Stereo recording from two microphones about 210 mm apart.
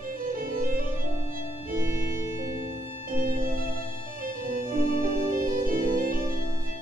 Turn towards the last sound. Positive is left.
turn(degrees=-45)  # may be behind; listen again after turning